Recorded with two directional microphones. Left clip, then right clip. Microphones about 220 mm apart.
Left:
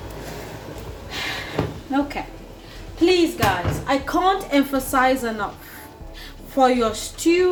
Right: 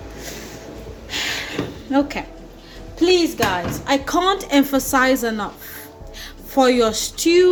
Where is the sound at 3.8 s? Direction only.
45° right (ahead or behind).